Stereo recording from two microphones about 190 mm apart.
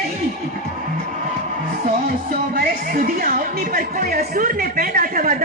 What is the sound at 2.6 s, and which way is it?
Speech, 50° right (ahead or behind).